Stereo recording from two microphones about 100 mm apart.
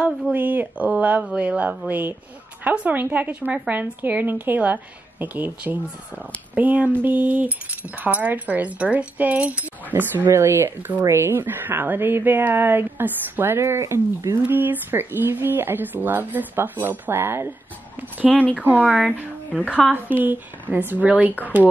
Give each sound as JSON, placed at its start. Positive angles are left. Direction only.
{"t": 0.3, "sound": "speech", "side_deg": -15}
{"t": 14.4, "sound": "speech", "side_deg": -20}
{"t": 18.3, "sound": "speech", "side_deg": 0}
{"t": 18.6, "sound": "speech", "side_deg": -15}
{"t": 19.6, "sound": "a woman's voice", "side_deg": 15}
{"t": 20.1, "sound": "speech", "side_deg": -20}